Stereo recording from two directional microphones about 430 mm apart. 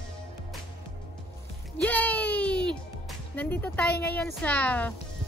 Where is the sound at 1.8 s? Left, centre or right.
Centre.